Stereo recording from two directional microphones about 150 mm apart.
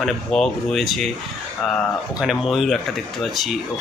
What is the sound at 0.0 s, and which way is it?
Speech, centre (ahead or behind).